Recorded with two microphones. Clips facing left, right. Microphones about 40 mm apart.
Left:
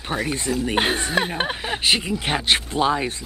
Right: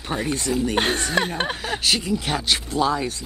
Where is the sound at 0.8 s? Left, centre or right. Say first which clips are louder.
Left 2 dB; centre.